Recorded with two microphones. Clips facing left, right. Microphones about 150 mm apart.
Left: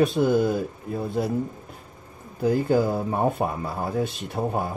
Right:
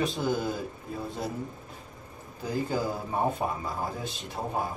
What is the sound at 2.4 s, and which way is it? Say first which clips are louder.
Speech: left 9 dB; 60° left (ahead or behind).